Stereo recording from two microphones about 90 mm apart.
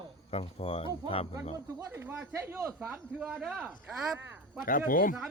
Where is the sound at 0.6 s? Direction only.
90° left.